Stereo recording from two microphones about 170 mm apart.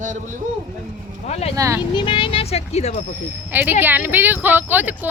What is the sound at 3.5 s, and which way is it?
Speech, 10° right (ahead or behind).